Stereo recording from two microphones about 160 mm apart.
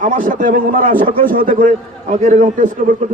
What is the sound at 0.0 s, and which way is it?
A man's voice, 60° right (ahead or behind).